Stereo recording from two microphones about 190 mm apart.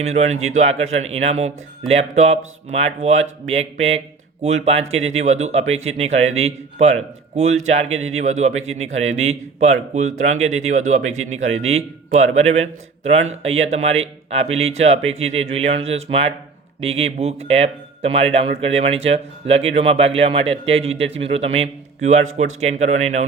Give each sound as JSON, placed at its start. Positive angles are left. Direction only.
{"t": 0.0, "sound": "speech", "side_deg": -35}